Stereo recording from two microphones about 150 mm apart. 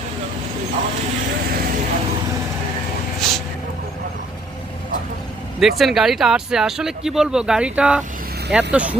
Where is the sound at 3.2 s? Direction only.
Centre (ahead or behind).